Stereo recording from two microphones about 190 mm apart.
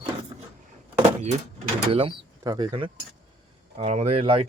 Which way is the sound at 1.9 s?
25° right (ahead or behind).